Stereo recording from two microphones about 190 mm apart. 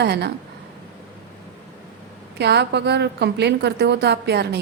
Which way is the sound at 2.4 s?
60° right (ahead or behind).